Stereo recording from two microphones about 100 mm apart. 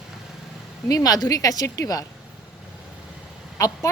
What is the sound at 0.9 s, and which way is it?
Speech, 40° left (ahead or behind).